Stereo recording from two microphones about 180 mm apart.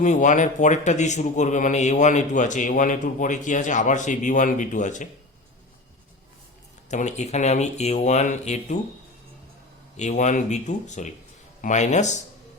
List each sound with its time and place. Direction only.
0.0 s a man's voice: 45° left (ahead or behind)
6.9 s speech: 40° left (ahead or behind)
10.0 s speech: 40° left (ahead or behind)